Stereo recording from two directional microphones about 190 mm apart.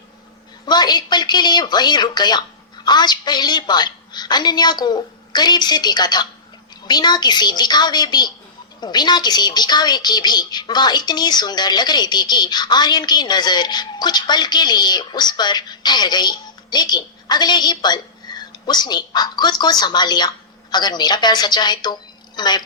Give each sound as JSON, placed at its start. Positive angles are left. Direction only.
{"t": 0.6, "sound": "speech", "side_deg": 20}